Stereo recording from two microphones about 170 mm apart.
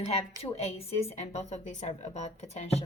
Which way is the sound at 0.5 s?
35° left (ahead or behind).